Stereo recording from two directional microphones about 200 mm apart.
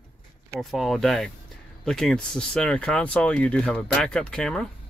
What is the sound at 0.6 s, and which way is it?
Speech, centre (ahead or behind).